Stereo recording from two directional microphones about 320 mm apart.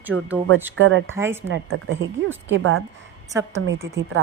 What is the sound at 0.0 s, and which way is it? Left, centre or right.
Speech, centre.